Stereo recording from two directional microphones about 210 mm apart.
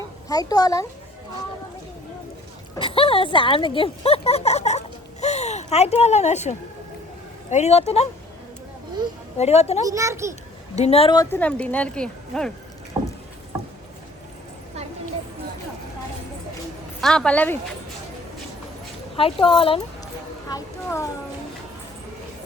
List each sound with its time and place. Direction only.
0.3 s speech: 15° left (ahead or behind)
2.7 s speech: 25° left (ahead or behind)
9.4 s speech: 30° left (ahead or behind)
9.8 s a child's voice: 15° right (ahead or behind)
10.8 s speech: 30° left (ahead or behind); by 12.5 s 5° left (ahead or behind)
12.9 s vehicle: 15° right (ahead or behind)
17.0 s a woman's voice: 5° left (ahead or behind)
19.1 s speech: 25° left (ahead or behind)
20.5 s speech: 15° left (ahead or behind)